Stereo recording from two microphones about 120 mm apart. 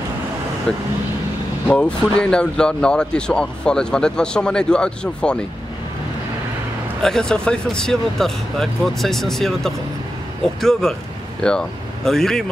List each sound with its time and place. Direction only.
0.7 s speech: 5° left (ahead or behind)
7.0 s speech: 5° left (ahead or behind)